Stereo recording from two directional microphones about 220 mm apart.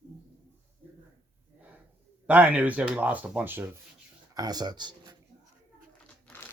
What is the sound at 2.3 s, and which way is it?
Speech, 5° right (ahead or behind).